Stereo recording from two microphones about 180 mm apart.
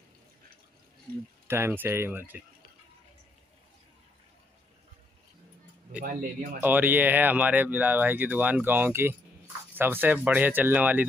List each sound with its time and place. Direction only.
1.5 s speech: 15° right (ahead or behind)
5.9 s speech: 50° right (ahead or behind)
6.6 s speech: 10° right (ahead or behind)